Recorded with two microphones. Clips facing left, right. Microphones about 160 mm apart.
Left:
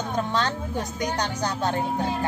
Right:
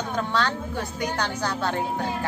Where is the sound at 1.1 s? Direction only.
20° left (ahead or behind).